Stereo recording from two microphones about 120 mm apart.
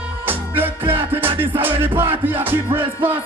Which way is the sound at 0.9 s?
50° right (ahead or behind).